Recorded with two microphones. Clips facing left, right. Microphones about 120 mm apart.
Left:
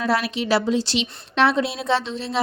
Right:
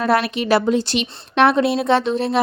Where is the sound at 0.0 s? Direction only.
55° right (ahead or behind).